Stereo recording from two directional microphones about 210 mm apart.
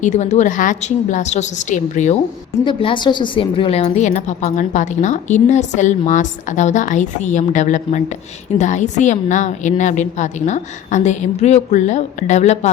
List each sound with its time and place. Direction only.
0.0 s a woman's voice: 35° left (ahead or behind)
2.6 s a woman's voice: 25° left (ahead or behind)